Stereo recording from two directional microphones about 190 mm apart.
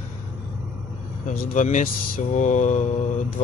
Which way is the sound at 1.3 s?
40° left (ahead or behind).